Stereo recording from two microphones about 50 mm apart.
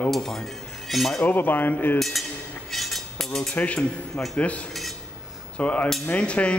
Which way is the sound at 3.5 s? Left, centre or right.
Left.